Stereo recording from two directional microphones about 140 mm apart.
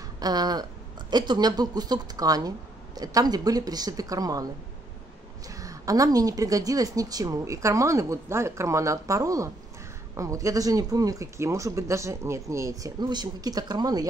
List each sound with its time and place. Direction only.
0.2 s speech: 30° right (ahead or behind)
5.5 s speech: 25° right (ahead or behind)